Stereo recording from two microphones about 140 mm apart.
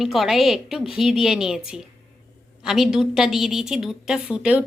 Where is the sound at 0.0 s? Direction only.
Centre (ahead or behind).